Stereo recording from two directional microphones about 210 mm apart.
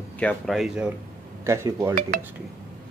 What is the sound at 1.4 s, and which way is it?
Speech, 15° right (ahead or behind).